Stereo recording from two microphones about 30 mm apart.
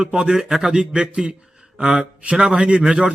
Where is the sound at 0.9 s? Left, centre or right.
Right.